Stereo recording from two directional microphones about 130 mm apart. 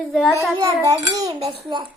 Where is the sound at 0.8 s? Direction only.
25° right (ahead or behind).